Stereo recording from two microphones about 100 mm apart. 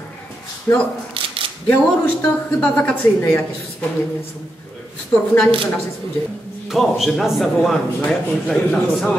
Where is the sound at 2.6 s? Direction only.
15° left (ahead or behind).